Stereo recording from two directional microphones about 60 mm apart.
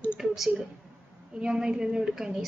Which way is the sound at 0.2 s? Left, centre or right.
Centre.